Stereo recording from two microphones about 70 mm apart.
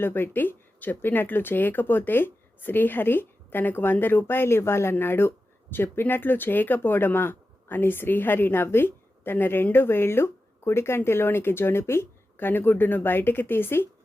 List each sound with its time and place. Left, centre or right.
0.0 s speech: left